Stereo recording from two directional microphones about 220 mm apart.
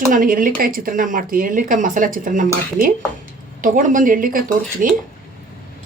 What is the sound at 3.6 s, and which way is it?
Speech, 35° right (ahead or behind).